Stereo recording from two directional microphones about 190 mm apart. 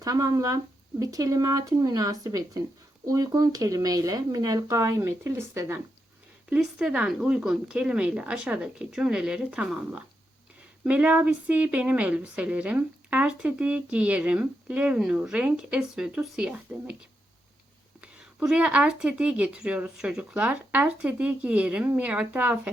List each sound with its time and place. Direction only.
0.0 s a woman's voice: 15° right (ahead or behind)
18.0 s a woman's voice: 5° right (ahead or behind)